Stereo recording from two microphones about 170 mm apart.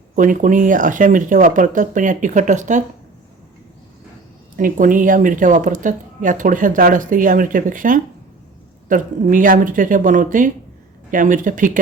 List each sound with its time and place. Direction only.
0.2 s speech: 50° right (ahead or behind)
4.5 s speech: 55° right (ahead or behind)